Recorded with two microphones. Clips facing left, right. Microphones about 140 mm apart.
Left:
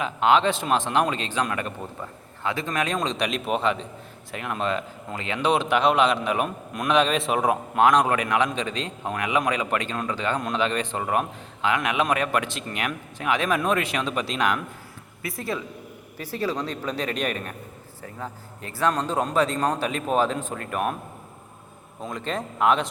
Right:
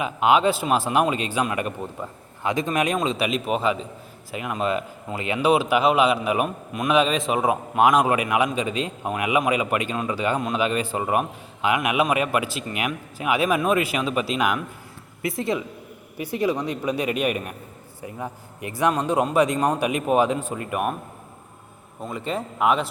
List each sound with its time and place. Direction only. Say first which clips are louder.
0.0 s speech: right 1 dB; 10° right (ahead or behind)
15.2 s speech: right 5 dB; 25° right (ahead or behind)
22.0 s speech: right 2 dB; 5° right (ahead or behind)